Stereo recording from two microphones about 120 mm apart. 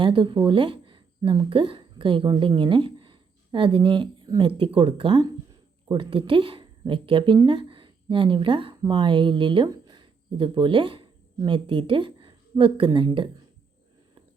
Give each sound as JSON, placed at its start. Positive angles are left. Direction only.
{"t": 0.0, "sound": "a woman's voice", "side_deg": -45}